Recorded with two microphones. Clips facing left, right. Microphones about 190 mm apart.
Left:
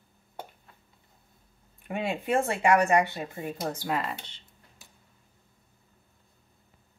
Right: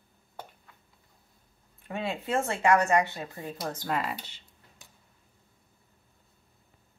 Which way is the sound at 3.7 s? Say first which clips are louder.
Right 2 dB; 10° left (ahead or behind).